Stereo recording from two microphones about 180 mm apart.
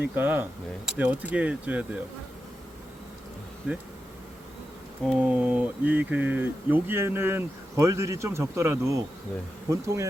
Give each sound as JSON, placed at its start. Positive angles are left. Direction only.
{"t": 0.2, "sound": "speech", "side_deg": -10}
{"t": 3.7, "sound": "speech", "side_deg": -5}
{"t": 5.0, "sound": "speech", "side_deg": -5}